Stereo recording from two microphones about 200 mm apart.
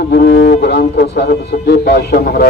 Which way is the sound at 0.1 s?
50° left (ahead or behind).